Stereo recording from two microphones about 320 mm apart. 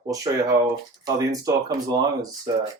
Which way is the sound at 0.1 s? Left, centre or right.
Centre.